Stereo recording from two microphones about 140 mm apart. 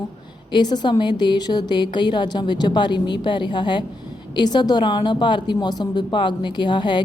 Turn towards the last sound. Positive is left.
turn(degrees=35)  # may be behind; listen again after turning